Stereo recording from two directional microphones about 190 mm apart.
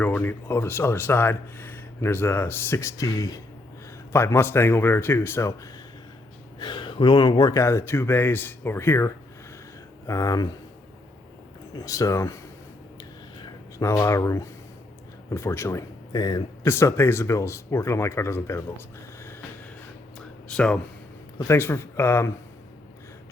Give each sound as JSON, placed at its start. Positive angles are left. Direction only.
{"t": 0.0, "sound": "speech", "side_deg": 10}
{"t": 6.6, "sound": "speech", "side_deg": 25}
{"t": 11.8, "sound": "speech", "side_deg": 15}
{"t": 13.0, "sound": "a sound", "side_deg": 20}
{"t": 15.3, "sound": "speech", "side_deg": 15}
{"t": 20.1, "sound": "a sound", "side_deg": 5}
{"t": 21.3, "sound": "speech", "side_deg": 15}